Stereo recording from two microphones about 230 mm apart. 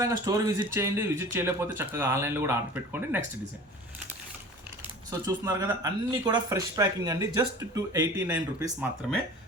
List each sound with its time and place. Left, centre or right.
0.0 s speech: centre
5.2 s speech: centre